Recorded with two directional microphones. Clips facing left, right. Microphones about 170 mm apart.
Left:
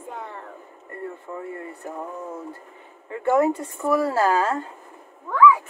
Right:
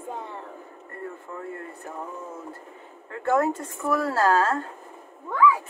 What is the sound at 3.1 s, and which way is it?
Speech, 15° left (ahead or behind).